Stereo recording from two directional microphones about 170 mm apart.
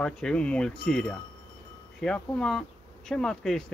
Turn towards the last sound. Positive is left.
turn(degrees=0)  # may be behind; listen again after turning